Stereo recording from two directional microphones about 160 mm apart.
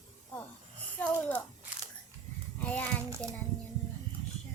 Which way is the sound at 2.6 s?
10° left (ahead or behind).